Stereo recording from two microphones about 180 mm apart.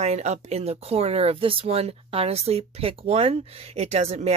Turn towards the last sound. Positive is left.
turn(degrees=-35)  # may be behind; listen again after turning